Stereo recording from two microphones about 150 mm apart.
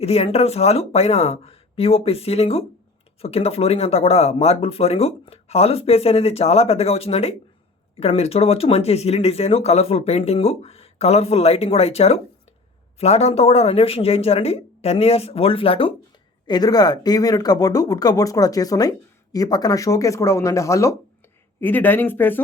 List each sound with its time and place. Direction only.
0.0 s speech: 40° left (ahead or behind)
16.5 s speech: 25° left (ahead or behind)